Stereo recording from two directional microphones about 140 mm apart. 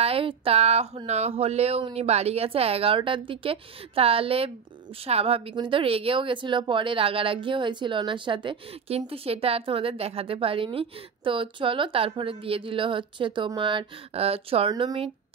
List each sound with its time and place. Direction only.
0.0 s a woman's voice: 40° right (ahead or behind)
14.7 s speech: 25° right (ahead or behind)